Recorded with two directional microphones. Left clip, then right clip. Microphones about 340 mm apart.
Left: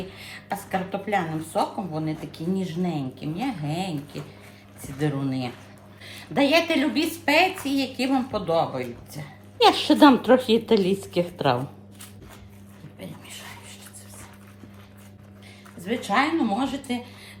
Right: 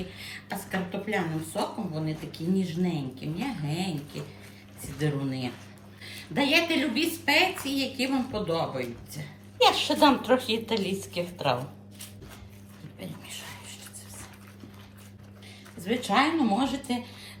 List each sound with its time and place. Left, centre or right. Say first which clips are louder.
0.2 s speech: left 7 dB; centre
9.6 s a woman's voice: left 4 dB; left
16.0 s speech: left 2 dB; centre